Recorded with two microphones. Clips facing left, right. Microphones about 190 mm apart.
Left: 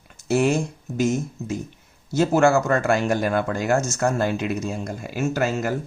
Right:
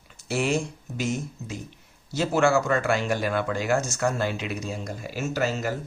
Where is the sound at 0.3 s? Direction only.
45° left (ahead or behind).